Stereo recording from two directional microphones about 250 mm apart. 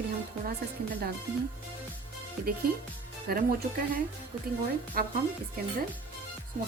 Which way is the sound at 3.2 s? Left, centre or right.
Right.